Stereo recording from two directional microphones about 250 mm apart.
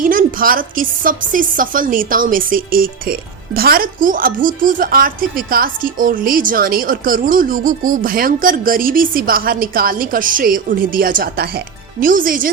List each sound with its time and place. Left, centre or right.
0.0 s speech: right